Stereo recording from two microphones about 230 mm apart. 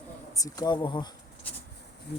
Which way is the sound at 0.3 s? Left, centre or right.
Centre.